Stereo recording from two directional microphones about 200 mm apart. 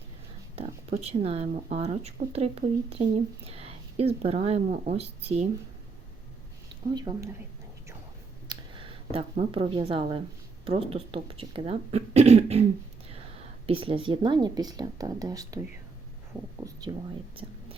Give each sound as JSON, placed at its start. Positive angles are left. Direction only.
{"t": 0.5, "sound": "speech", "side_deg": -30}
{"t": 6.9, "sound": "speech", "side_deg": -20}
{"t": 8.4, "sound": "speech", "side_deg": -25}
{"t": 13.7, "sound": "speech", "side_deg": -25}